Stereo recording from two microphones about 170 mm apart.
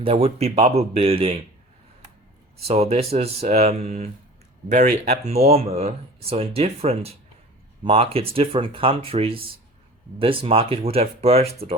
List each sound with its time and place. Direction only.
0.0 s speech: 35° right (ahead or behind)
2.6 s speech: 40° right (ahead or behind)